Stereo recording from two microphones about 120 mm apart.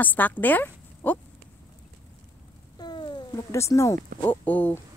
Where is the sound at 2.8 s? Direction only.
40° left (ahead or behind).